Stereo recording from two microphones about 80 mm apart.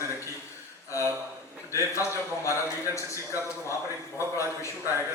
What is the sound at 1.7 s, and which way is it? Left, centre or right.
A man's voice, left.